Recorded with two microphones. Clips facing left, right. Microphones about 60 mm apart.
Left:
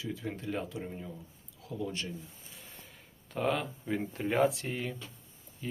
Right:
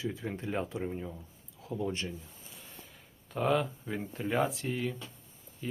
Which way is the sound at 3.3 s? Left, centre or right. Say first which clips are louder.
Right 2 dB; centre.